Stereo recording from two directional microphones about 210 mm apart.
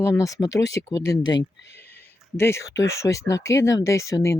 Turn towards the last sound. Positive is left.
turn(degrees=15)  # may be behind; listen again after turning